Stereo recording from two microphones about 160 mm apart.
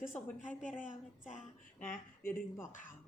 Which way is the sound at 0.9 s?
50° left (ahead or behind).